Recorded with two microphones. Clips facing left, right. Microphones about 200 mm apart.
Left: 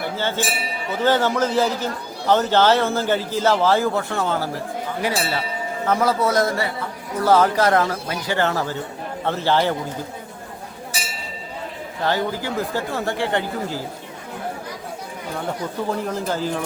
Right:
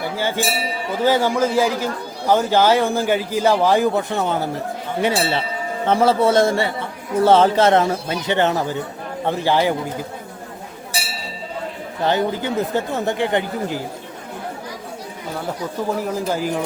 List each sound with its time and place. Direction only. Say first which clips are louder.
0.2 s a man's voice: right 4 dB; 10° right (ahead or behind)
12.0 s a man's voice: right 3 dB; 20° right (ahead or behind)
16.0 s a man's voice: right 2 dB; 10° right (ahead or behind)